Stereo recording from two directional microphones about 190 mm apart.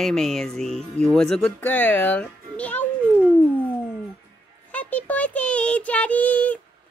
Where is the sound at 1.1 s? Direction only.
5° left (ahead or behind).